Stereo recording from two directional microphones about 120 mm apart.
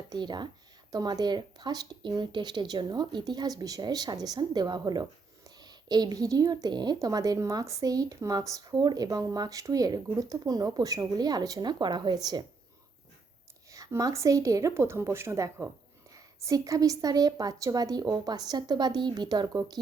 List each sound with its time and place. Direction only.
0.1 s a woman's voice: 35° right (ahead or behind)
13.7 s a woman's voice: 30° right (ahead or behind)